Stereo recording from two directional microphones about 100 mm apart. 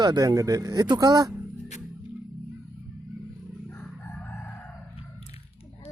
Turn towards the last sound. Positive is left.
turn(degrees=20)  # may be behind; listen again after turning